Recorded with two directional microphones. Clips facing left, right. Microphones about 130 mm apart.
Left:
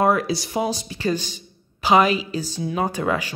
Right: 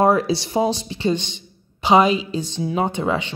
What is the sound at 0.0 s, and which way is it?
Speech, 30° right (ahead or behind).